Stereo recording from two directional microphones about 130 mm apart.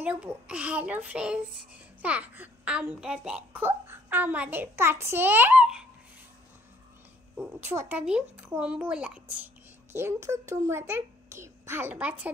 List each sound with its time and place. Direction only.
0.0 s a child's voice: 10° right (ahead or behind)
7.3 s a child's voice: 20° right (ahead or behind)
9.9 s a child's voice: 20° right (ahead or behind)